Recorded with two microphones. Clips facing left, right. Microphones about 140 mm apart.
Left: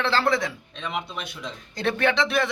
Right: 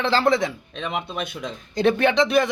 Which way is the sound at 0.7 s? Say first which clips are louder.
Right 3 dB; 50° right (ahead or behind).